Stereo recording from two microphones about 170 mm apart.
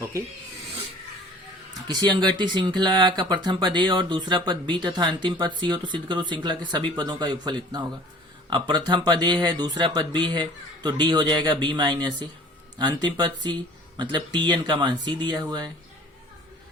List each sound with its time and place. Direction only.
1.9 s speech: 25° right (ahead or behind)